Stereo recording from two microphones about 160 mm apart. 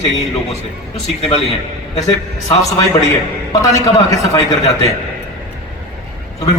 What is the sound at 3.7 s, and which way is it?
Speech, 20° left (ahead or behind).